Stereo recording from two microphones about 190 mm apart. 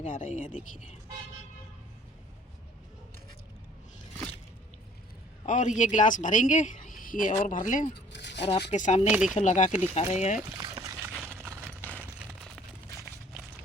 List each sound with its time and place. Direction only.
0.0 s speech: 40° left (ahead or behind)
5.5 s speech: 40° left (ahead or behind)
8.1 s a sound: 65° left (ahead or behind)
8.7 s speech: 40° left (ahead or behind)
9.0 s speech: 5° right (ahead or behind)
9.3 s speech: 40° left (ahead or behind)
10.6 s a sound: 20° right (ahead or behind)
11.6 s a sound: 10° left (ahead or behind)
13.3 s run: 5° right (ahead or behind)